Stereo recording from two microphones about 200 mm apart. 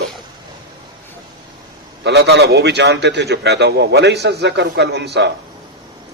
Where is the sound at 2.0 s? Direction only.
60° right (ahead or behind).